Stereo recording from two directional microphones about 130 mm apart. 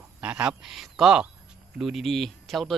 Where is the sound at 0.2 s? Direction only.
10° right (ahead or behind).